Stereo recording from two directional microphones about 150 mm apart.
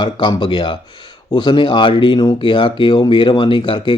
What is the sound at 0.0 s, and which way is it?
Speech, 30° left (ahead or behind).